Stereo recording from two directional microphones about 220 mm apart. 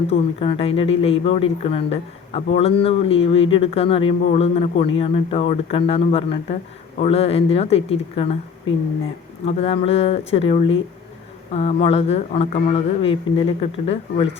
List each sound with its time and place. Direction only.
0.1 s a man's voice: 25° left (ahead or behind)
9.5 s a man's voice: 25° left (ahead or behind)